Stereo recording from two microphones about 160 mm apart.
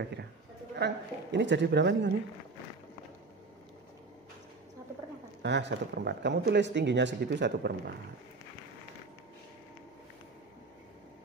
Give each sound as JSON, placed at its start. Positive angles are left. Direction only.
{"t": 0.7, "sound": "speech", "side_deg": -90}
{"t": 5.4, "sound": "speech", "side_deg": -90}